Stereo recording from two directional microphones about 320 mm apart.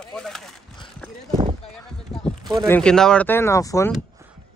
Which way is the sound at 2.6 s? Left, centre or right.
Centre.